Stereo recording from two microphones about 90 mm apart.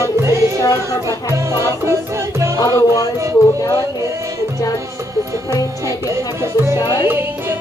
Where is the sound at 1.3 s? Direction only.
30° right (ahead or behind).